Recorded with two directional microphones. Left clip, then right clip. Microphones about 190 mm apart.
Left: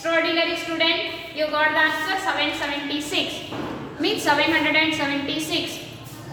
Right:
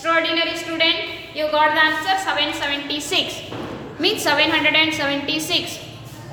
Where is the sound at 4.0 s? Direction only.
45° right (ahead or behind).